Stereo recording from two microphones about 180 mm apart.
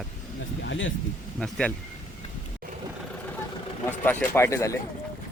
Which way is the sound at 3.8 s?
10° left (ahead or behind).